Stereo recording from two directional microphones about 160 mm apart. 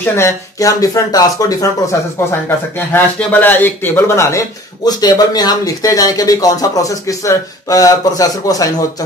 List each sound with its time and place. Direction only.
0.0 s speech: 15° left (ahead or behind)
2.9 s speech: 10° left (ahead or behind)